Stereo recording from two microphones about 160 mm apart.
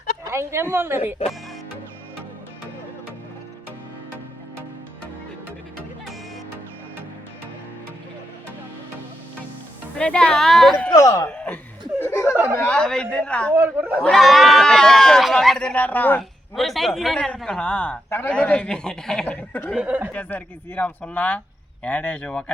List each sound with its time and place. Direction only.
0.3 s a woman's voice: 15° right (ahead or behind)
10.0 s a man's voice: 5° left (ahead or behind)
10.9 s speech: 20° left (ahead or behind)
11.3 s laughter: 10° left (ahead or behind)
12.0 s a sound: 15° left (ahead or behind)
12.5 s a man's voice: 5° left (ahead or behind)
13.5 s a woman's voice: 10° right (ahead or behind)
14.0 s a man's voice: centre (ahead or behind)
16.6 s a man's voice: centre (ahead or behind)
19.7 s a woman's voice: 10° right (ahead or behind)
20.1 s speech: 10° left (ahead or behind)